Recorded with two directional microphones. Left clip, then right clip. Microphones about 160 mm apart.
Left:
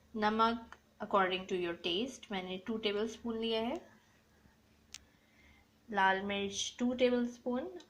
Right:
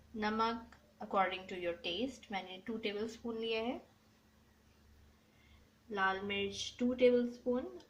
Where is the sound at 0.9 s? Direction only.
20° left (ahead or behind).